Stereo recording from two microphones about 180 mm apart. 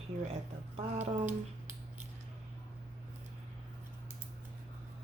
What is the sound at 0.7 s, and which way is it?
Speech, 35° right (ahead or behind).